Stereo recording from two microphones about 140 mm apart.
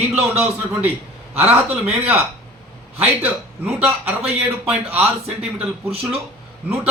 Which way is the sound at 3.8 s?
15° right (ahead or behind).